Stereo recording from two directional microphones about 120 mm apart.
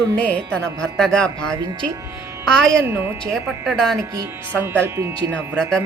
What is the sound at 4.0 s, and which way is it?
Speech, 25° right (ahead or behind).